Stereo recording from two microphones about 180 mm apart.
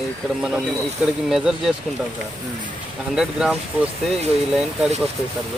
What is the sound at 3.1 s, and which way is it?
Speech, 5° right (ahead or behind).